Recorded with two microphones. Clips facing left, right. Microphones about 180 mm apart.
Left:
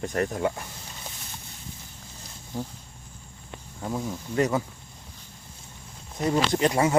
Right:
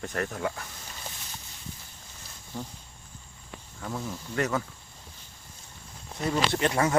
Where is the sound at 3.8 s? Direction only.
15° left (ahead or behind).